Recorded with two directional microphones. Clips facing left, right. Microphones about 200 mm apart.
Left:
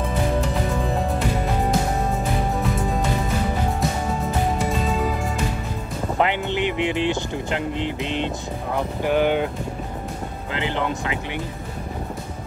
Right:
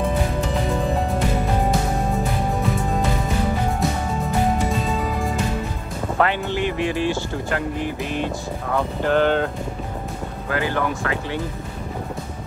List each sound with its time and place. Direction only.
6.1 s speech: 20° left (ahead or behind)
10.5 s speech: 20° left (ahead or behind)